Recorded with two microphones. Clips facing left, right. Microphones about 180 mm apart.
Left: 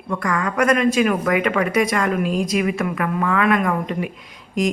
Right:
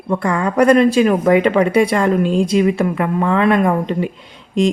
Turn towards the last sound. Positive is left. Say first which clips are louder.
# right 5 dB
turn(degrees=-30)  # may be behind; listen again after turning